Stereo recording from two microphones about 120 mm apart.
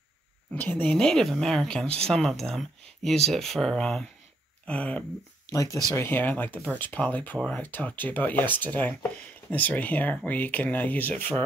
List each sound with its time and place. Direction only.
0.6 s speech: 15° left (ahead or behind)
0.8 s speech: 5° left (ahead or behind)
5.5 s speech: 30° left (ahead or behind)
5.9 s speech: 15° left (ahead or behind)